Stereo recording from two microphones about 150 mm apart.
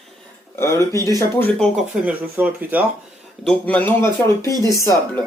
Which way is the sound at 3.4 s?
10° left (ahead or behind).